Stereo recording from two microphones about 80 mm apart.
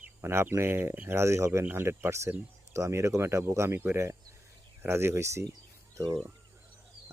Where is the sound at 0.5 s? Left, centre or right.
Right.